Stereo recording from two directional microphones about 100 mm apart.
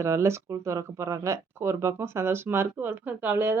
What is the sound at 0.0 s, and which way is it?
Speech, 30° right (ahead or behind).